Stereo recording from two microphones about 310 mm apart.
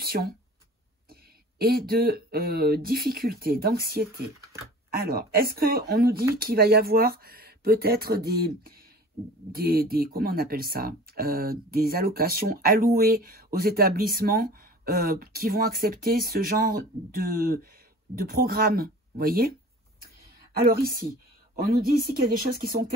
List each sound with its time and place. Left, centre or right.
0.0 s a sound: right
1.6 s speech: right
9.5 s speech: right
20.6 s speech: right
22.6 s speech: right